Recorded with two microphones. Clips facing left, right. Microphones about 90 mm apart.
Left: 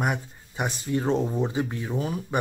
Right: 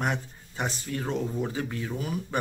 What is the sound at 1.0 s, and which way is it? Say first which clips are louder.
Speech: left 4 dB; 30° left (ahead or behind).